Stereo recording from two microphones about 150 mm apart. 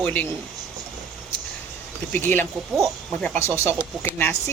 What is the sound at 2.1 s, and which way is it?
Speech, 10° left (ahead or behind).